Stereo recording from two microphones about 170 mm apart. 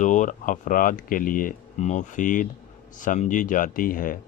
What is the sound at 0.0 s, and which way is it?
Speech, 45° left (ahead or behind).